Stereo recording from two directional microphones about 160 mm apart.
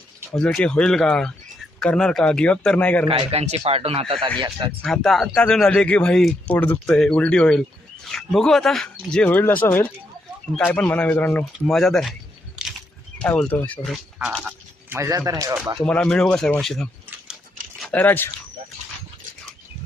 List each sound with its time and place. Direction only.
0.3 s speech: 5° left (ahead or behind)
3.1 s speech: 40° right (ahead or behind)
4.8 s speech: centre (ahead or behind)
12.6 s a sound: 5° right (ahead or behind)
13.1 s speech: 5° left (ahead or behind)
14.9 s speech: 20° right (ahead or behind)
15.9 s speech: 5° left (ahead or behind)
17.7 s a sound: centre (ahead or behind)
18.0 s speech: 10° left (ahead or behind)